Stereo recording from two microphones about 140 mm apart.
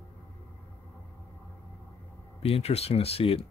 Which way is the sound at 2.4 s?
45° left (ahead or behind).